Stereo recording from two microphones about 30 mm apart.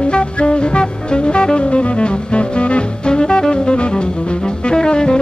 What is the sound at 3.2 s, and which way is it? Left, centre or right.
Music, left.